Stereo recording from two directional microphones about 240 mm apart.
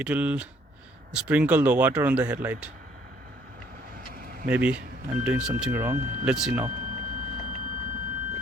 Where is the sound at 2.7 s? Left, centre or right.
Right.